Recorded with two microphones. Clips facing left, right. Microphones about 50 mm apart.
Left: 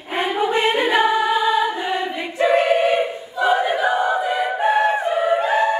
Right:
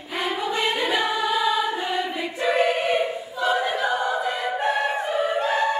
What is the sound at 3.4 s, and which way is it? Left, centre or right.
Choir, centre.